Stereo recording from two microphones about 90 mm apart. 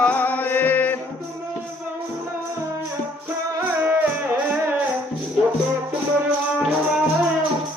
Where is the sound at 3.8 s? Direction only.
25° right (ahead or behind).